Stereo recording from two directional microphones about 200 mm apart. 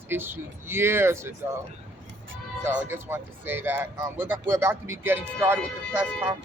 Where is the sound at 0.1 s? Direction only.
10° right (ahead or behind).